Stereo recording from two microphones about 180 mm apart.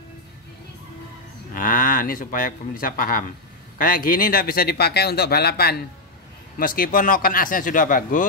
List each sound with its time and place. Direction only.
1.5 s a man's voice: 50° left (ahead or behind)